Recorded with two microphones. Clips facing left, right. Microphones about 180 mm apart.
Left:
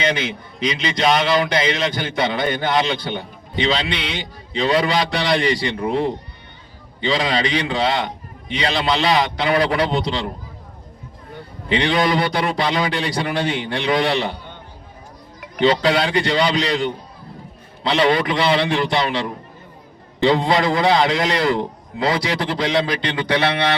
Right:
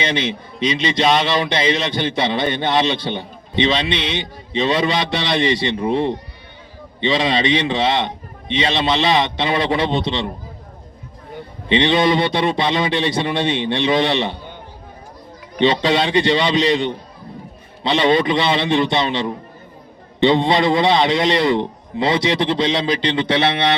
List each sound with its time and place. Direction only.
0.0 s a man's voice: 25° right (ahead or behind)
11.7 s a man's voice: 25° right (ahead or behind)
15.5 s a man's voice: 25° right (ahead or behind)